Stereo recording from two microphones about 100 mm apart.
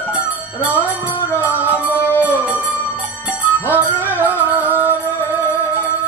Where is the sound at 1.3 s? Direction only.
15° right (ahead or behind).